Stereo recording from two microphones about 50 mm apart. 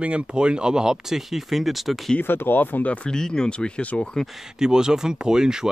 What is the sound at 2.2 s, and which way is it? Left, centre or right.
Speech, left.